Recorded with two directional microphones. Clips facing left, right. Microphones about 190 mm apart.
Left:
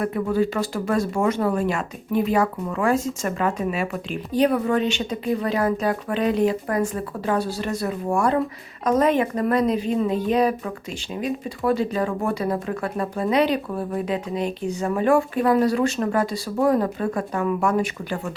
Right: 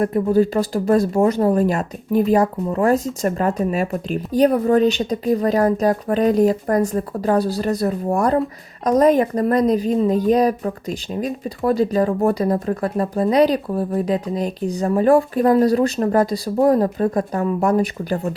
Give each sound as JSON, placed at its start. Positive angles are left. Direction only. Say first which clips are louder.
{"t": 0.0, "sound": "speech", "louder": "right 5 dB", "side_deg": -40}